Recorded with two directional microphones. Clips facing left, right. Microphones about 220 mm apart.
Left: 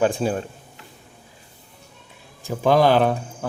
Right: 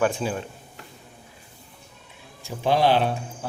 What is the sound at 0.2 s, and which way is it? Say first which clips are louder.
Speech: left 5 dB; 45° left (ahead or behind).